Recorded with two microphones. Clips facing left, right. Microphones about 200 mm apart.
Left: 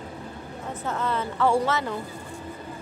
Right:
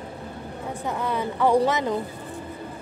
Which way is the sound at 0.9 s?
15° right (ahead or behind).